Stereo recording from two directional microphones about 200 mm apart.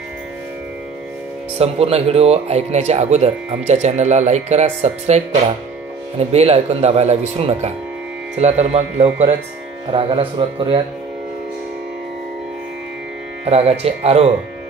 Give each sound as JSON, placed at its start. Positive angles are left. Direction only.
{"t": 1.6, "sound": "speech", "side_deg": -30}
{"t": 13.5, "sound": "speech", "side_deg": -30}